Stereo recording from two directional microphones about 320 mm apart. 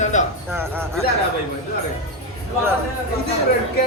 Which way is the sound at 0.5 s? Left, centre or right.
Centre.